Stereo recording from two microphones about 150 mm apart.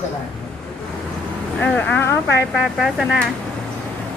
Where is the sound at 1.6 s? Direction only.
10° left (ahead or behind).